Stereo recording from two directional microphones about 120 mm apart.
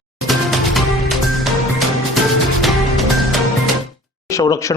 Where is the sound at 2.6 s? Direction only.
Centre (ahead or behind).